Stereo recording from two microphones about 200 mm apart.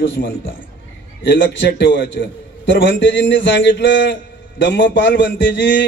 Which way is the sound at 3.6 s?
60° left (ahead or behind).